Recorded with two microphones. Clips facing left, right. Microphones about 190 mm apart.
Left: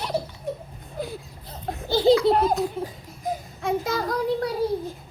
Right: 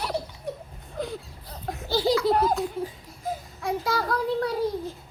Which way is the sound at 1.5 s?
25° left (ahead or behind).